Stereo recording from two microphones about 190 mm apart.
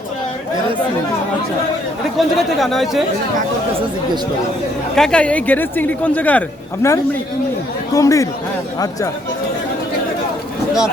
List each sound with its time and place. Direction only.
2.1 s speech: centre (ahead or behind)
4.9 s speech: 5° left (ahead or behind)